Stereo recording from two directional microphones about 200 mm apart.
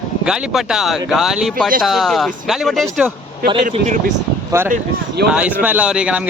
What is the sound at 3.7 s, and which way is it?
Speech, 35° right (ahead or behind).